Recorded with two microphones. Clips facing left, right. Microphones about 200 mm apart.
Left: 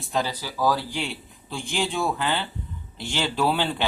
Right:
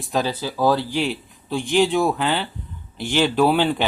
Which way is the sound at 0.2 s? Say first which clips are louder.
Right 4 dB; 20° right (ahead or behind).